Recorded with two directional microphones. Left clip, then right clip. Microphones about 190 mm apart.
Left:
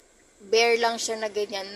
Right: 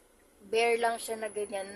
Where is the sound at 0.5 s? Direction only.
10° left (ahead or behind).